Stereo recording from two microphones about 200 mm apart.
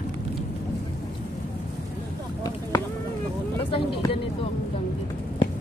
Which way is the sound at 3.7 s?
25° left (ahead or behind).